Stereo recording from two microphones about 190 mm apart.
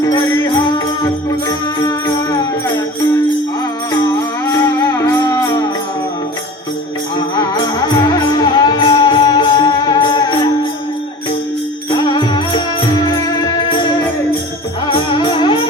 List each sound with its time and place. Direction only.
0.0 s music: 15° left (ahead or behind)
4.0 s music: 15° left (ahead or behind)
7.3 s music: 20° left (ahead or behind)
11.9 s music: 25° left (ahead or behind)
14.8 s music: 25° left (ahead or behind)